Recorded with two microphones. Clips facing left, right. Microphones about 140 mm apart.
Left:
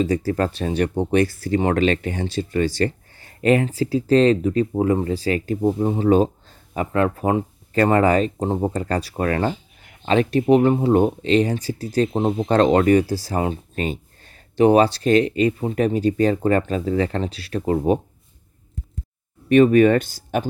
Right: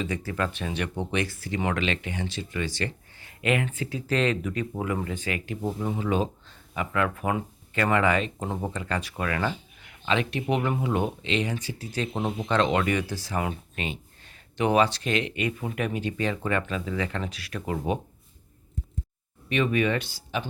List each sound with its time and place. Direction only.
0.0 s speech: 35° left (ahead or behind)
19.5 s speech: 45° left (ahead or behind)